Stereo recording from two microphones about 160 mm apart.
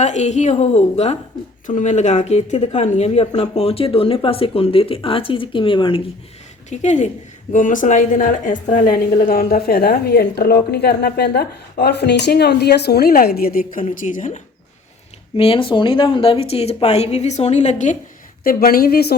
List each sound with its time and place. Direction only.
0.0 s a woman's voice: 45° left (ahead or behind)
6.7 s a woman's voice: 45° left (ahead or behind); by 13.8 s 65° left (ahead or behind)
13.8 s a woman's voice: 55° left (ahead or behind)
15.4 s speech: 35° left (ahead or behind)
18.4 s a woman's voice: 65° left (ahead or behind)